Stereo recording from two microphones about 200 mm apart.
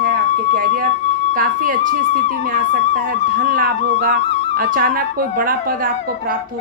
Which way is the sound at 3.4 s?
45° right (ahead or behind).